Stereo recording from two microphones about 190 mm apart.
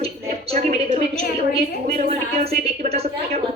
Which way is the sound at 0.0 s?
30° right (ahead or behind).